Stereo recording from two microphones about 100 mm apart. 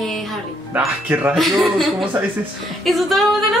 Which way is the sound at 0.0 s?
Centre (ahead or behind).